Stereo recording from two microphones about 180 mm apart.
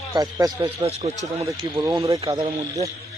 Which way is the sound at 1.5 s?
20° right (ahead or behind).